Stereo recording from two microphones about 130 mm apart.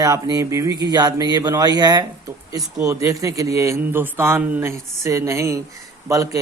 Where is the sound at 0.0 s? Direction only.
25° right (ahead or behind).